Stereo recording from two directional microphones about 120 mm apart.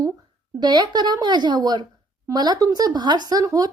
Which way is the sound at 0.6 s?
40° right (ahead or behind).